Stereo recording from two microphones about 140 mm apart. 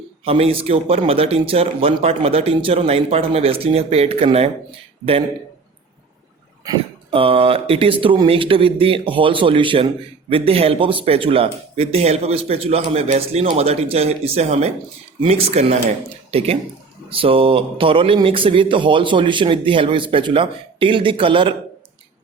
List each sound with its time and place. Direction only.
0.3 s speech: 45° right (ahead or behind)
7.1 s speech: 40° right (ahead or behind)